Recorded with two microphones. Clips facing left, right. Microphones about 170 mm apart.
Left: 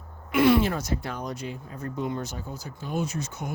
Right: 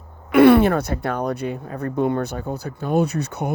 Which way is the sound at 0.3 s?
60° right (ahead or behind).